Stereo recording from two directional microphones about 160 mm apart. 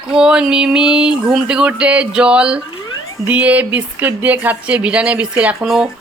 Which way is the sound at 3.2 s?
10° right (ahead or behind).